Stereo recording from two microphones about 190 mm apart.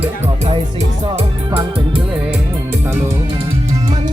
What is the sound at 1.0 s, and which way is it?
Music, 25° right (ahead or behind).